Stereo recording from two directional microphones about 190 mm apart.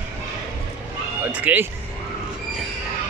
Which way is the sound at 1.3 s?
10° right (ahead or behind).